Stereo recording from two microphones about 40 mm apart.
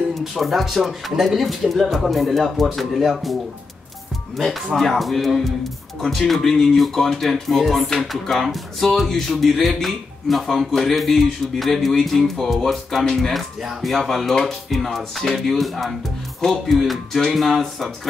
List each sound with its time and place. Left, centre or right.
0.4 s music: centre
4.7 s music: centre
13.1 s speech: centre
13.6 s music: centre